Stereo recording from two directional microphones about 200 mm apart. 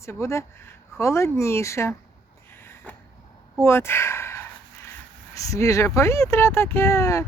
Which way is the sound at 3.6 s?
10° left (ahead or behind).